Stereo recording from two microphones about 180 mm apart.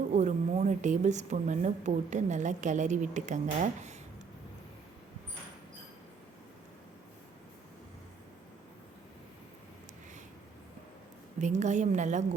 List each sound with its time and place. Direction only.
0.1 s a woman's voice: 40° right (ahead or behind)
11.3 s a woman's voice: 40° right (ahead or behind)